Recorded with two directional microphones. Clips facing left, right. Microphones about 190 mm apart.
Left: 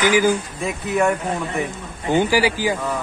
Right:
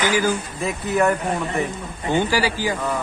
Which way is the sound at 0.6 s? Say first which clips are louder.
Right 2 dB; centre (ahead or behind).